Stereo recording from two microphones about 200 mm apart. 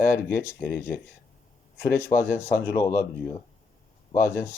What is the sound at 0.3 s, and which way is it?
Speech, 15° left (ahead or behind).